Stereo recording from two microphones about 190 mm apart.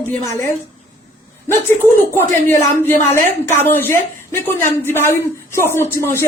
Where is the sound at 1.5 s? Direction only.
10° left (ahead or behind).